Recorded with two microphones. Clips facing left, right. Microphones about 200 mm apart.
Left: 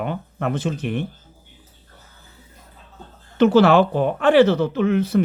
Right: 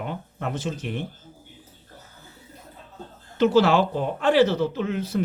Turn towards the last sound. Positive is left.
turn(degrees=65)  # may be behind; listen again after turning